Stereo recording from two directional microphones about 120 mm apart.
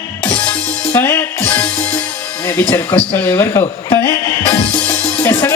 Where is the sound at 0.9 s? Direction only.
20° left (ahead or behind).